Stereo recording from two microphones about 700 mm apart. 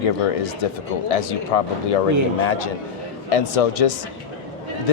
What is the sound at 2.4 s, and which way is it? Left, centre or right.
Speech, left.